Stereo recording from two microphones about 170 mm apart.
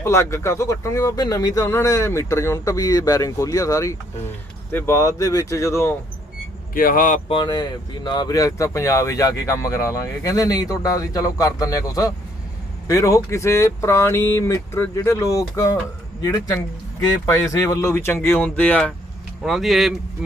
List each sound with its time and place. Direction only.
0.0 s speech: 15° left (ahead or behind)
6.7 s speech: 55° left (ahead or behind)
7.3 s speech: 30° left (ahead or behind); by 19.9 s centre (ahead or behind)